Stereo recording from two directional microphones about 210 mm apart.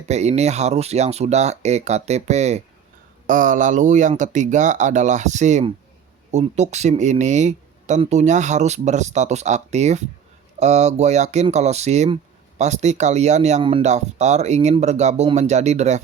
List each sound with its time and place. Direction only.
0.1 s speech: 30° right (ahead or behind)